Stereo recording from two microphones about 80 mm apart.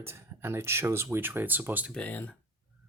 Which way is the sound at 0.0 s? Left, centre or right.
Right.